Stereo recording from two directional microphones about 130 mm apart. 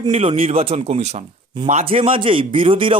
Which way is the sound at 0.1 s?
50° right (ahead or behind).